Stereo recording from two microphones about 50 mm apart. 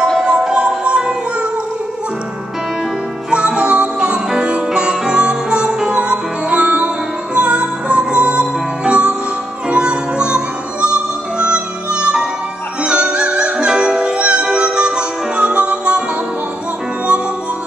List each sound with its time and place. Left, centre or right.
0.3 s music: centre
3.3 s music: centre